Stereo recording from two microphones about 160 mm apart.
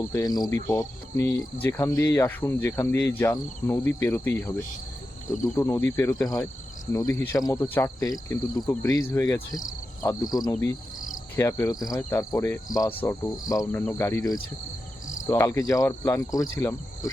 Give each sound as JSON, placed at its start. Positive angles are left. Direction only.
{"t": 0.0, "sound": "cricket", "side_deg": 20}
{"t": 1.6, "sound": "speech", "side_deg": 15}
{"t": 5.5, "sound": "cricket", "side_deg": 15}
{"t": 10.5, "sound": "speech", "side_deg": 15}
{"t": 11.9, "sound": "cricket", "side_deg": 15}
{"t": 13.7, "sound": "speech", "side_deg": 15}
{"t": 15.3, "sound": "cricket", "side_deg": 15}